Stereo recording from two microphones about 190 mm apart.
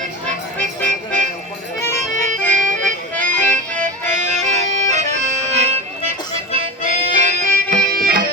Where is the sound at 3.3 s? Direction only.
10° left (ahead or behind).